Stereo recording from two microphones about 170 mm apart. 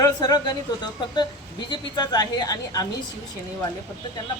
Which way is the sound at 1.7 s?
25° left (ahead or behind).